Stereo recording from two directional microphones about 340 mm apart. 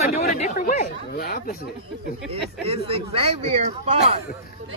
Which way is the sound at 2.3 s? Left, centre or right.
Centre.